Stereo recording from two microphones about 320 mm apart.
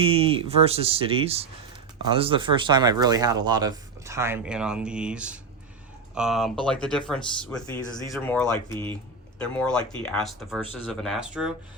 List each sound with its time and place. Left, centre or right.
0.0 s speech: centre
8.1 s speech: centre